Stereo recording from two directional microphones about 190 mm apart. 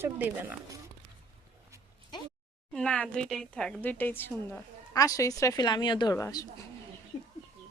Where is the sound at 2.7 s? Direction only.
5° left (ahead or behind).